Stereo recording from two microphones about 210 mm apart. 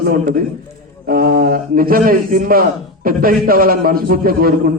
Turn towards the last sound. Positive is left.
turn(degrees=-45)  # may be behind; listen again after turning